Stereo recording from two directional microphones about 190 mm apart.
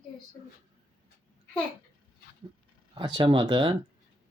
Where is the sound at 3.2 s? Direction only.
25° right (ahead or behind).